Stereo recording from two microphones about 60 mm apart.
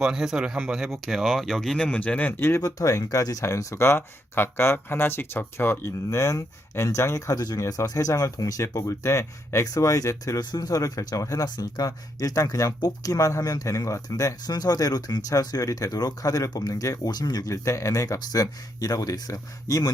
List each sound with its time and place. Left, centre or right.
0.0 s a man's voice: centre
0.9 s speech: centre
2.0 s speech: left
2.6 s speech: left
3.4 s speech: left
3.8 s speech: left
6.1 s speech: left
8.6 s speech: left
9.6 s speech: left